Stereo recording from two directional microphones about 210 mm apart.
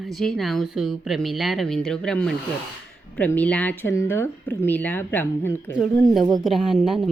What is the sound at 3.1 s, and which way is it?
Speech, 5° left (ahead or behind).